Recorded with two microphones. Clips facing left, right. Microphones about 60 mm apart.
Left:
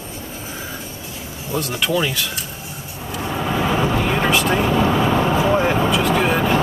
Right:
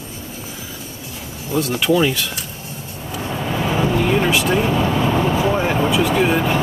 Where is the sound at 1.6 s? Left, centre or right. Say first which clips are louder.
Right 4 dB; centre.